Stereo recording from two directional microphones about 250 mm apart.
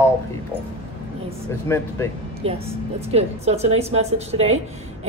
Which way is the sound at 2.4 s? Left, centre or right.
Right.